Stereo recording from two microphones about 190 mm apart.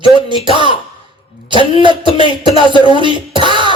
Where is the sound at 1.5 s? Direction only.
25° right (ahead or behind).